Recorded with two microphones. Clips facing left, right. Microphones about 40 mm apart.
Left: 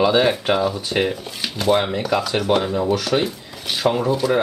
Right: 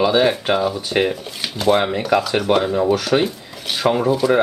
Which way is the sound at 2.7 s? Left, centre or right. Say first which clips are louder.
Right 3 dB; centre.